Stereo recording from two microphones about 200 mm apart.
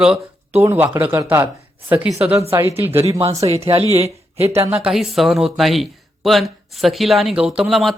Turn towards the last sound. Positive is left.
turn(degrees=0)  # may be behind; listen again after turning